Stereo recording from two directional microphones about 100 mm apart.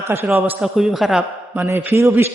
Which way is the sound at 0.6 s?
5° right (ahead or behind).